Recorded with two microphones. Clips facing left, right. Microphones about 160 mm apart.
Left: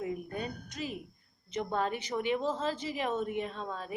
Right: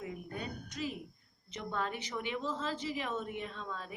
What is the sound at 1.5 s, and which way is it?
A woman's voice, 45° left (ahead or behind).